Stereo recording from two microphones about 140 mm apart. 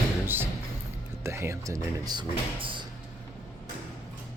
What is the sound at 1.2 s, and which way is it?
Speech, 20° right (ahead or behind).